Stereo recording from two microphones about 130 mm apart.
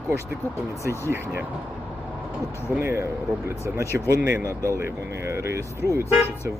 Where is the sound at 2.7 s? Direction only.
20° right (ahead or behind).